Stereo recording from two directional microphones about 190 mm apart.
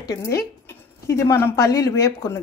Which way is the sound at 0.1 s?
15° left (ahead or behind).